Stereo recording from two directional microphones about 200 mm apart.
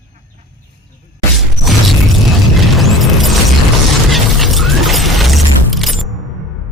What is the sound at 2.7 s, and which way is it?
Boom, centre (ahead or behind).